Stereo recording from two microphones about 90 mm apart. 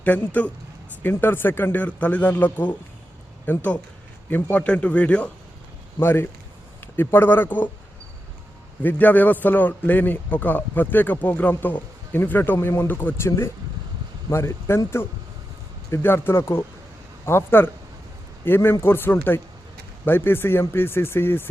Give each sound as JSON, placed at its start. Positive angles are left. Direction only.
{"t": 0.0, "sound": "a man's voice", "side_deg": 20}
{"t": 6.0, "sound": "a man's voice", "side_deg": 25}
{"t": 8.8, "sound": "a man's voice", "side_deg": 20}
{"t": 15.9, "sound": "a man's voice", "side_deg": 25}